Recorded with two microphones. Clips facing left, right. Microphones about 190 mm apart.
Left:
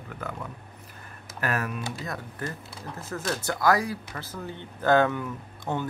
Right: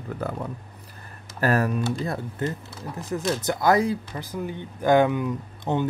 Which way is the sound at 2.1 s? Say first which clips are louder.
Right 6 dB; 20° right (ahead or behind).